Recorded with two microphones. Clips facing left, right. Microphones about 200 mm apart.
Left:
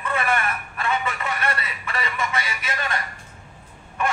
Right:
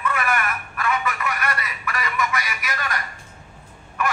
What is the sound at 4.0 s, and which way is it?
Crow, 30° left (ahead or behind).